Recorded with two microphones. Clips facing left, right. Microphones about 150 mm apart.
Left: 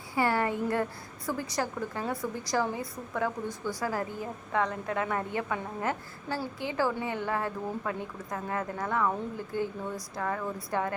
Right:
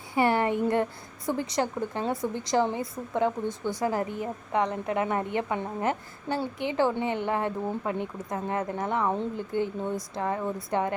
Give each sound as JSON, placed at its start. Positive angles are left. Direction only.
{"t": 0.1, "sound": "a woman's voice", "side_deg": -20}